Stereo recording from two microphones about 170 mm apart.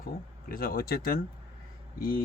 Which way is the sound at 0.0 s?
60° left (ahead or behind).